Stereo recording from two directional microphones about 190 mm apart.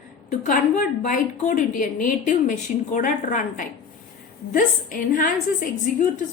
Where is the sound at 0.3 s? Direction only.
45° left (ahead or behind).